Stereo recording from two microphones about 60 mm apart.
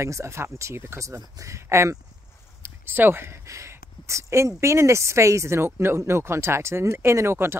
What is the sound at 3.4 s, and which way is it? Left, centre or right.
Speech, right.